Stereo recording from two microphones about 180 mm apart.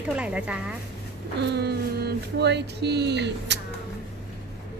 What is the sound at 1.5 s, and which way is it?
Speech, 65° right (ahead or behind).